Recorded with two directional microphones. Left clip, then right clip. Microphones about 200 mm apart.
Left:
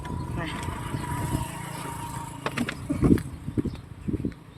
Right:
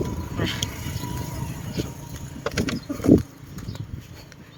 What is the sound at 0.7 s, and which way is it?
Vehicle, 35° right (ahead or behind).